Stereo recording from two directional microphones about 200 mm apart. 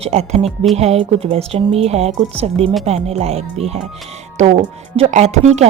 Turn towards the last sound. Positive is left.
turn(degrees=-35)  # may be behind; listen again after turning